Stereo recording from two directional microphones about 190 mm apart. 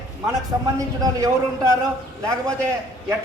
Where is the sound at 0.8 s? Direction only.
20° right (ahead or behind).